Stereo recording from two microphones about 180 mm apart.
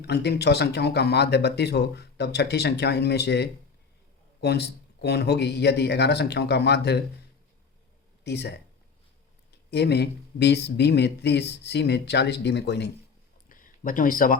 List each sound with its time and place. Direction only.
0.0 s speech: 65° left (ahead or behind)
8.2 s speech: 70° left (ahead or behind)
13.5 s a sound: 50° left (ahead or behind)